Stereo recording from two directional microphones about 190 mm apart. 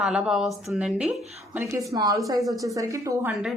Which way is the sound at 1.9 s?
15° right (ahead or behind).